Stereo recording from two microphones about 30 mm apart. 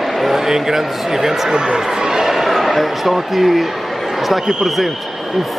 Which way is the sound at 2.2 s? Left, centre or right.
Centre.